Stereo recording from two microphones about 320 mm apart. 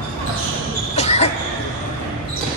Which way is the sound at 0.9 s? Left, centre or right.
Centre.